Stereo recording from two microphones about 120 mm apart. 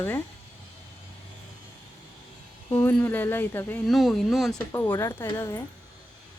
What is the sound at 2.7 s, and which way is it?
Speech, 15° left (ahead or behind).